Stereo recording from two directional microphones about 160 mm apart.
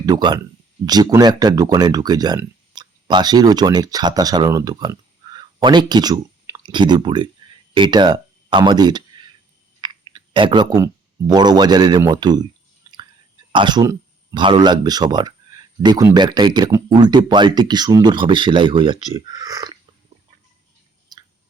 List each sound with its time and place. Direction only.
0.0 s speech: 25° right (ahead or behind)
9.8 s chewing: 25° right (ahead or behind)
11.3 s speech: 25° right (ahead or behind)
12.9 s chewing: 20° right (ahead or behind)
13.5 s a sound: 30° right (ahead or behind)
14.4 s speech: 30° right (ahead or behind)
21.1 s chewing: 25° right (ahead or behind)